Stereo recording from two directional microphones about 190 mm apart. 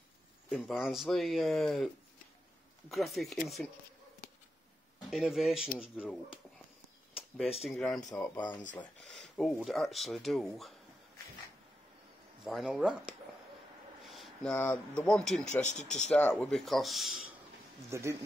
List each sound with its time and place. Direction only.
0.5 s speech: 5° left (ahead or behind)
2.9 s speech: centre (ahead or behind)
5.1 s speech: centre (ahead or behind)
7.4 s speech: 30° left (ahead or behind)
7.7 s speech: 5° left (ahead or behind)
8.0 s speech: 20° left (ahead or behind)
8.7 s speech: centre (ahead or behind)
12.4 s speech: centre (ahead or behind)
15.6 s speech: 40° left (ahead or behind)
16.1 s speech: 5° left (ahead or behind)
17.8 s speech: 15° right (ahead or behind)